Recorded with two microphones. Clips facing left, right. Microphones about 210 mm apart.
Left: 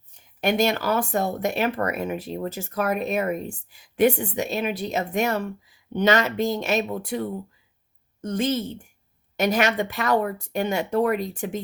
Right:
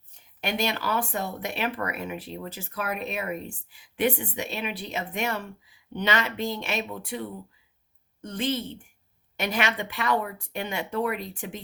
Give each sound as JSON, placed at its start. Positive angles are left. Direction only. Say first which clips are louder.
{"t": 0.4, "sound": "speech", "louder": "left 7 dB", "side_deg": 45}